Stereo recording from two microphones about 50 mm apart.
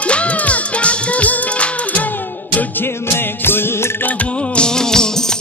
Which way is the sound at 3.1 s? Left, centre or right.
Left.